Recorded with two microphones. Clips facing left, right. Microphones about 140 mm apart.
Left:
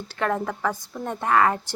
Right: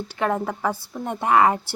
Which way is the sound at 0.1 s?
10° right (ahead or behind).